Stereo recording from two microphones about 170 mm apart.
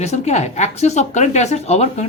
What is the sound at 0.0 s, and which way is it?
A man's voice, 40° left (ahead or behind).